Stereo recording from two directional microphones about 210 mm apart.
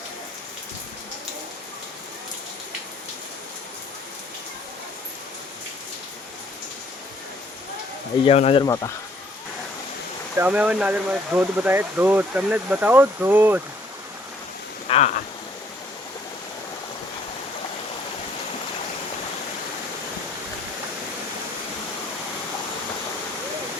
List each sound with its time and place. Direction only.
8.2 s speech: 30° left (ahead or behind)
8.6 s speech: 15° left (ahead or behind)
10.3 s speech: 10° right (ahead or behind)
14.8 s a sound: 30° left (ahead or behind)